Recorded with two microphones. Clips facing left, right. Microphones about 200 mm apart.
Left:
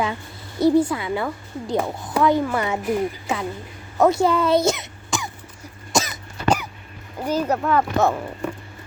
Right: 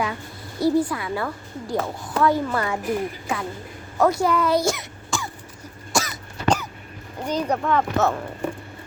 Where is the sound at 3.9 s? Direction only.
25° left (ahead or behind).